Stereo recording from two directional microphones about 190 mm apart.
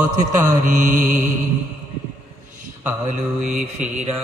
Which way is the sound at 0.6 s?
45° right (ahead or behind).